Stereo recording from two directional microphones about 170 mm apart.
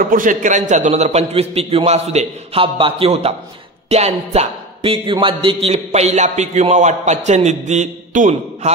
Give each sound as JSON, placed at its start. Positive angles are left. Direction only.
{"t": 0.0, "sound": "a man's voice", "side_deg": -50}